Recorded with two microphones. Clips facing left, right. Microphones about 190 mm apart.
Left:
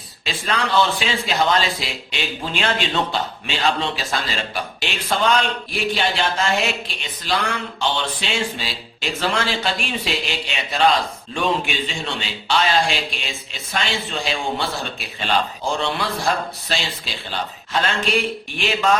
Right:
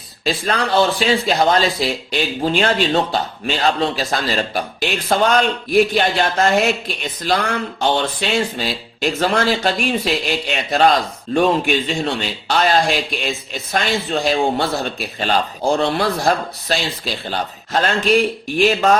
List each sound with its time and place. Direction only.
0.3 s speech: 40° right (ahead or behind)